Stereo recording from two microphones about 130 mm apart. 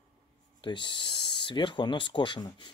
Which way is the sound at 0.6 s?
40° left (ahead or behind).